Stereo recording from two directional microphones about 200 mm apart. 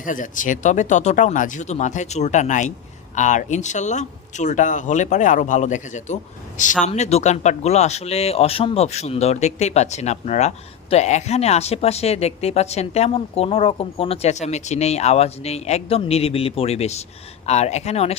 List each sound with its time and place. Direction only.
0.0 s speech: 40° left (ahead or behind)